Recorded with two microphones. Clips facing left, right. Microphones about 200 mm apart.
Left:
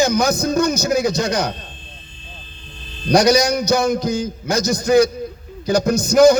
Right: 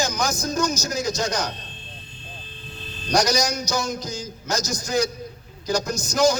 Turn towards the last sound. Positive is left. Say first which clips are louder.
# left 9 dB
turn(degrees=60)  # may be behind; listen again after turning